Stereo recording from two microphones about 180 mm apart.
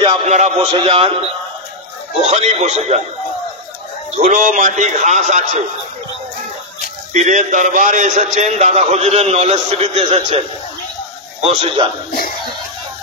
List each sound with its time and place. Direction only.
0.0 s a man's voice: 35° right (ahead or behind)
2.2 s a man's voice: 40° right (ahead or behind)
4.2 s a man's voice: 45° right (ahead or behind)
7.2 s a man's voice: 40° right (ahead or behind)
11.4 s a man's voice: 30° right (ahead or behind)